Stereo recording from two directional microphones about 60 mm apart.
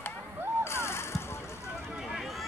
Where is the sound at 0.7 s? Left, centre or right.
Left.